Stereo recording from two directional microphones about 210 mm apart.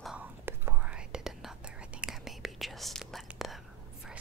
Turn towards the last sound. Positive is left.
turn(degrees=0)  # may be behind; listen again after turning